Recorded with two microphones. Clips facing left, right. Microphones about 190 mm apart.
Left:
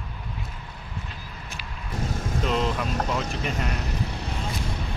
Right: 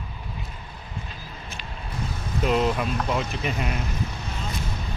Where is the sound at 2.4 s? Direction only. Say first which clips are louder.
Right 4 dB; 5° right (ahead or behind).